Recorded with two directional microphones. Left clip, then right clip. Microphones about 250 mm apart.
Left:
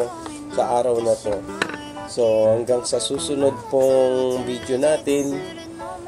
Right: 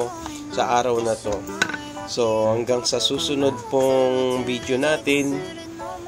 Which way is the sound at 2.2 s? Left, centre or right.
Right.